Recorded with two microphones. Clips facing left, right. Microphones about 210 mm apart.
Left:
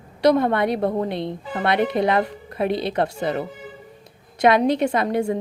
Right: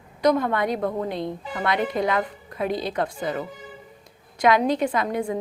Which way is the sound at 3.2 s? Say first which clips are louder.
Left 4 dB; 30° left (ahead or behind).